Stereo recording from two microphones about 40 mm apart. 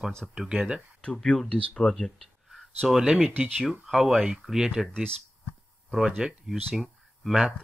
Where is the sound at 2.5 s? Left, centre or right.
Centre.